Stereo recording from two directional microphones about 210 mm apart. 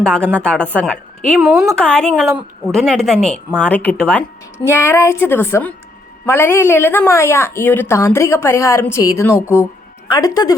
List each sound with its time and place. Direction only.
0.0 s a woman's voice: 5° left (ahead or behind)